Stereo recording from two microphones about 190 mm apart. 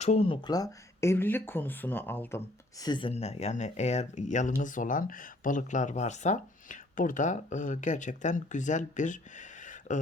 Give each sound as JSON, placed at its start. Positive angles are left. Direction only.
{"t": 0.0, "sound": "speech", "side_deg": 35}
{"t": 2.8, "sound": "speech", "side_deg": 25}